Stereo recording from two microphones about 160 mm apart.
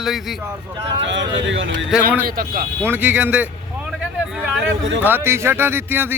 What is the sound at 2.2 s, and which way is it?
Speech, 65° right (ahead or behind).